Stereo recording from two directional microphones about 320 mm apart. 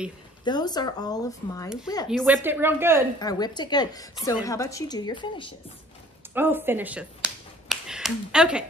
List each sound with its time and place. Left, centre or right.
0.5 s a woman's voice: centre
2.0 s a woman's voice: centre
3.2 s a woman's voice: centre
6.3 s speech: centre